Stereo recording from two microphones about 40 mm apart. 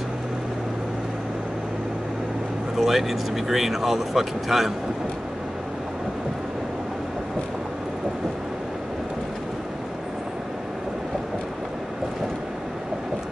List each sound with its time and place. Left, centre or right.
2.8 s speech: centre